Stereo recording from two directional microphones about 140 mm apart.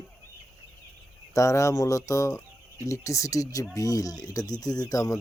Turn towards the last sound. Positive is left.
turn(degrees=25)  # may be behind; listen again after turning